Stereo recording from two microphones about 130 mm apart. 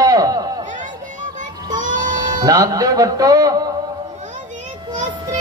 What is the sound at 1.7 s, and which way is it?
Music, 75° right (ahead or behind).